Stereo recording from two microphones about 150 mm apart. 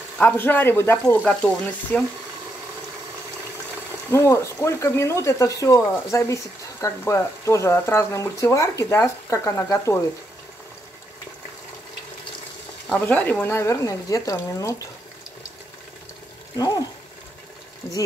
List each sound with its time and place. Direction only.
0.2 s speech: 15° left (ahead or behind)
4.1 s speech: 15° left (ahead or behind)
13.0 s speech: 10° left (ahead or behind)
16.5 s speech: 25° left (ahead or behind)